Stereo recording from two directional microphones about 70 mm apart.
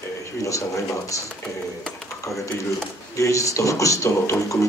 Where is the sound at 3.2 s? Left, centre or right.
Left.